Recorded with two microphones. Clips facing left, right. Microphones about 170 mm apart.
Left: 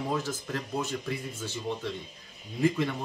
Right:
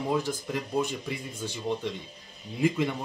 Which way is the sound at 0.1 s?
15° right (ahead or behind).